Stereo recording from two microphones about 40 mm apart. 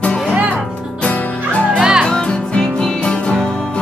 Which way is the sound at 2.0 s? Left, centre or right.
Left.